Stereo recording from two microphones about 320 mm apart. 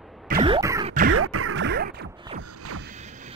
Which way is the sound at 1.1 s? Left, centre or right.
Right.